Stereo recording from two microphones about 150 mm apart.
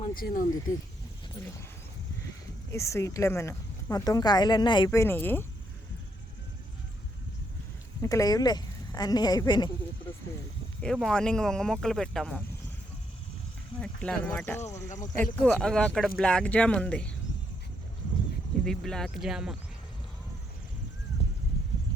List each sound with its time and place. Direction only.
0.2 s speech: 80° left
2.7 s speech: 20° left (ahead or behind)
4.9 s speech: 15° left (ahead or behind)
8.0 s speech: 20° left (ahead or behind)
10.8 s speech: 5° left (ahead or behind)
13.7 s speech: 5° left (ahead or behind)
18.6 s speech: 5° left (ahead or behind)